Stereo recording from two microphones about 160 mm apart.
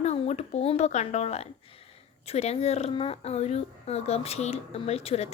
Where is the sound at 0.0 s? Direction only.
45° left (ahead or behind).